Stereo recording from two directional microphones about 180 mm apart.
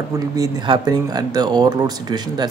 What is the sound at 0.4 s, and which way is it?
Speech, 25° right (ahead or behind).